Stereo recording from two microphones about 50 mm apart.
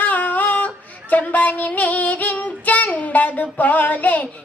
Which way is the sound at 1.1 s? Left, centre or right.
Left.